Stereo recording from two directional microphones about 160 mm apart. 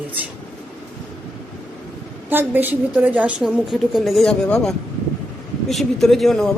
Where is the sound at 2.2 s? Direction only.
10° right (ahead or behind).